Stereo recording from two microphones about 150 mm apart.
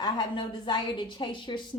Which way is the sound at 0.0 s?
35° left (ahead or behind).